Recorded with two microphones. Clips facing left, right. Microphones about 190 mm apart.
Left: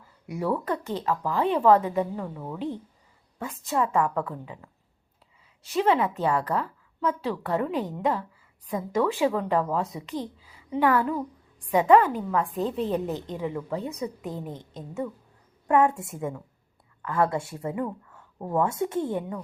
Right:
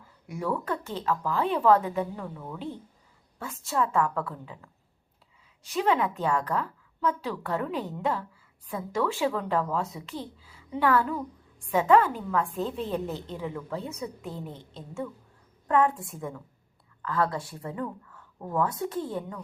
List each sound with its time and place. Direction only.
0.3 s a woman's voice: 10° left (ahead or behind)
2.2 s a woman's voice: 20° left (ahead or behind)
6.0 s a woman's voice: 10° left (ahead or behind)
9.8 s speech: 35° left (ahead or behind)
10.8 s a woman's voice: 10° left (ahead or behind)
12.5 s speech: 35° left (ahead or behind)
13.3 s a woman's voice: 10° left (ahead or behind)
14.3 s speech: 40° left (ahead or behind)
15.6 s a woman's voice: 25° left (ahead or behind)